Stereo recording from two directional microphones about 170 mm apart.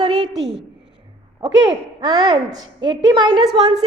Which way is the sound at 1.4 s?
25° right (ahead or behind).